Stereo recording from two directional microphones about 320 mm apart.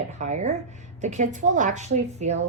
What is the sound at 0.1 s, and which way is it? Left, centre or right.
A woman's voice, right.